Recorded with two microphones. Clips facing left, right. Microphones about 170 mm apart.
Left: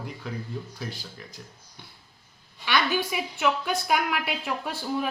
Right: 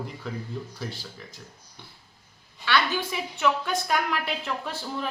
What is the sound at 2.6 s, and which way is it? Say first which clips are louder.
A woman's voice: even; 15° left (ahead or behind).